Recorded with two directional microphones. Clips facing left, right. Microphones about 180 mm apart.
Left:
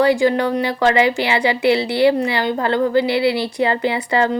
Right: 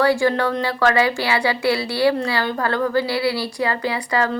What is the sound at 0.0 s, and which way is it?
Speech, 20° left (ahead or behind).